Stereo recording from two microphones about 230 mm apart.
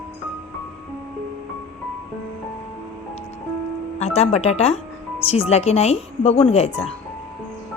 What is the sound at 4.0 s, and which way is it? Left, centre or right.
Speech, left.